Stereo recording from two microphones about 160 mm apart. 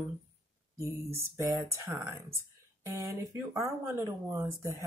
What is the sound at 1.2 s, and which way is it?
Speech, 15° right (ahead or behind).